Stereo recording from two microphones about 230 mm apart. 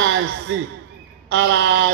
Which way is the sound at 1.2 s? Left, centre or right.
Right.